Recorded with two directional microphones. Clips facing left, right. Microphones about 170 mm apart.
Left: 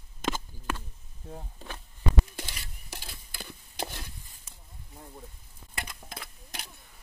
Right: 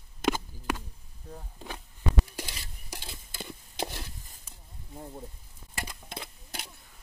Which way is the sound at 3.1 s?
20° right (ahead or behind).